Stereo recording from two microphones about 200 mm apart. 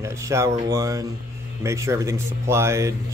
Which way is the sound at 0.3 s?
15° right (ahead or behind).